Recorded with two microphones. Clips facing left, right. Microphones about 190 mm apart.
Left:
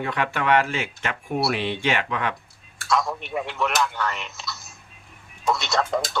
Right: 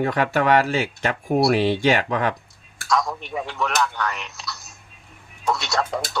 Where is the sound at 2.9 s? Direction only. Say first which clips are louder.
Right 1 dB; centre (ahead or behind).